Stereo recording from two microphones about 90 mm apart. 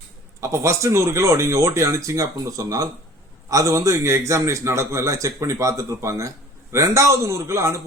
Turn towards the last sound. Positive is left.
turn(degrees=-35)  # may be behind; listen again after turning